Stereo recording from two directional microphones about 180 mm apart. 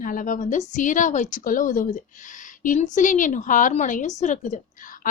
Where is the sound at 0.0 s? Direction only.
50° left (ahead or behind).